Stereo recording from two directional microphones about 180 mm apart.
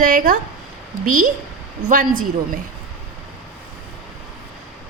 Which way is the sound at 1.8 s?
50° right (ahead or behind).